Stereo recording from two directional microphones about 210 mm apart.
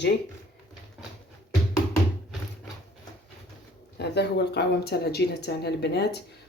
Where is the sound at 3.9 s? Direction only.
50° left (ahead or behind).